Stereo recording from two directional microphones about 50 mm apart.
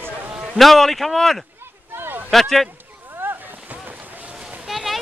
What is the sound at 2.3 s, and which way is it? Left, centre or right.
Speech, centre.